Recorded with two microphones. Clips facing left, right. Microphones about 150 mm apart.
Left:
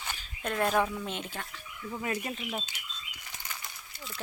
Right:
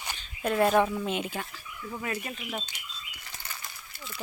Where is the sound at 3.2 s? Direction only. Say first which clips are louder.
Even; 15° left (ahead or behind).